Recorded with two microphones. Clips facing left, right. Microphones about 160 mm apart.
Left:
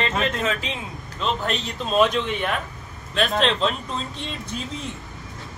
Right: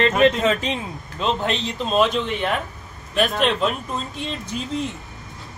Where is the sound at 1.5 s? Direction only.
Centre (ahead or behind).